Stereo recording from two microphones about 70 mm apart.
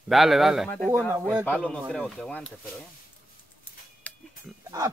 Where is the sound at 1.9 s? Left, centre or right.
Centre.